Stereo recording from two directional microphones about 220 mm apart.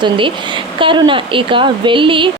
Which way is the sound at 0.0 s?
20° right (ahead or behind).